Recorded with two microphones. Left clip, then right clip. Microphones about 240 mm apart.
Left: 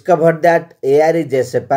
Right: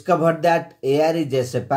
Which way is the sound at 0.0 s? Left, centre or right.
Left.